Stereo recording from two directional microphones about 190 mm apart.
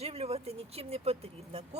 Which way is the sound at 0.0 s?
30° right (ahead or behind).